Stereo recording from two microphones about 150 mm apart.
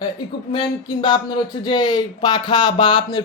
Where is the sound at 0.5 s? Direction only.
30° left (ahead or behind).